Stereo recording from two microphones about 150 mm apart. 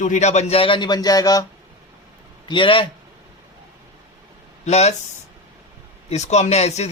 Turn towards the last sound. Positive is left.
turn(degrees=45)  # may be behind; listen again after turning